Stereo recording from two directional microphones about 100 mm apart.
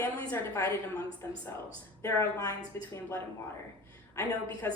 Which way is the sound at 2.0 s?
30° left (ahead or behind).